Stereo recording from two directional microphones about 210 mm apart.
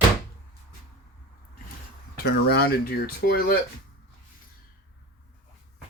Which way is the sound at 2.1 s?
50° left (ahead or behind).